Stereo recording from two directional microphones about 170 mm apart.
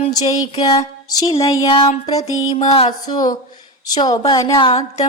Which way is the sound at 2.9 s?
25° left (ahead or behind).